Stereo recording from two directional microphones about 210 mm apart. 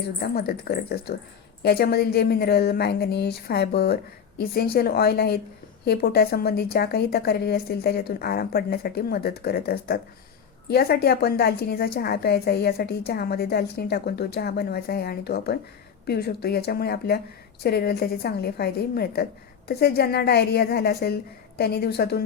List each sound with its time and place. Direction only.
0.2 s a woman's voice: 45° left (ahead or behind)